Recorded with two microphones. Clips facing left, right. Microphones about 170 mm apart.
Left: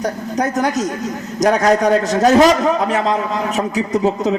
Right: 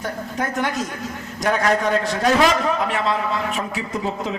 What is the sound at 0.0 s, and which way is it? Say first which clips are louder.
A man's voice: left 6 dB; 40° left (ahead or behind).